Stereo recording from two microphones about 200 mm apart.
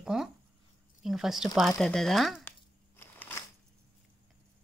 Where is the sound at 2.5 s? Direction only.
10° left (ahead or behind).